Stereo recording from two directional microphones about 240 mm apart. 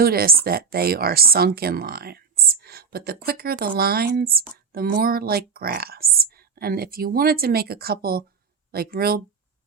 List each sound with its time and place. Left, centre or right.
0.0 s speech: right